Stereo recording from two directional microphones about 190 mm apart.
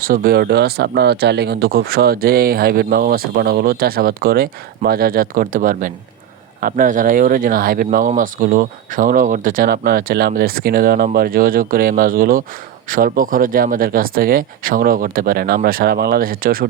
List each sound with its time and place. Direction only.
0.0 s speech: 50° right (ahead or behind)